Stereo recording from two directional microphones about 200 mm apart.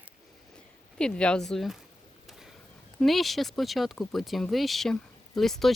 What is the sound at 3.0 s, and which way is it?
Speech, centre (ahead or behind).